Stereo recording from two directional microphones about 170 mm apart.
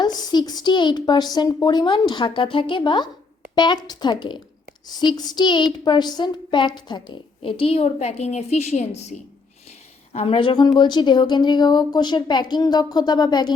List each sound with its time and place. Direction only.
0.0 s a woman's voice: 25° left (ahead or behind)